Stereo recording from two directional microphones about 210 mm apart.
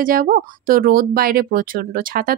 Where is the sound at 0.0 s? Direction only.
40° right (ahead or behind).